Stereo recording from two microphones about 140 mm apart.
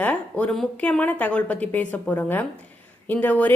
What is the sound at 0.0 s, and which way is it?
Speech, 10° left (ahead or behind).